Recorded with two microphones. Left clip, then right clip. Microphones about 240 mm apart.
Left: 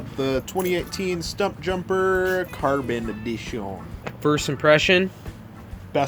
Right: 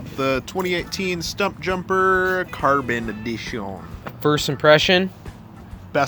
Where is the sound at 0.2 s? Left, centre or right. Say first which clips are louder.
Right 2 dB; right.